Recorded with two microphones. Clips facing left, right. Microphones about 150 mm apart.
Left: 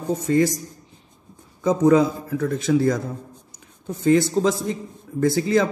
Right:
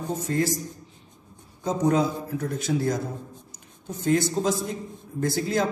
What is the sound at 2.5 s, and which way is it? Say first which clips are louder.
Speech: left 7 dB; 90° left.